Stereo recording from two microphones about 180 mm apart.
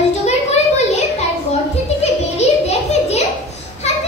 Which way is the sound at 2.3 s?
35° left (ahead or behind).